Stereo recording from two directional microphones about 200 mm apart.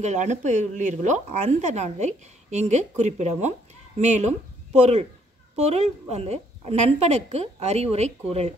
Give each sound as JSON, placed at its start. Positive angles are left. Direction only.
{"t": 0.0, "sound": "speech", "side_deg": -35}